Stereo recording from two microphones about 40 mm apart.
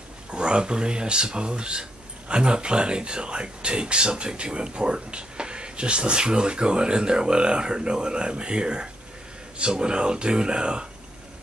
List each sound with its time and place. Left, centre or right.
0.3 s speech: right